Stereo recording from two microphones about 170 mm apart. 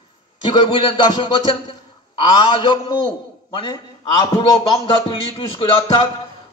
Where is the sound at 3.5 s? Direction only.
25° left (ahead or behind).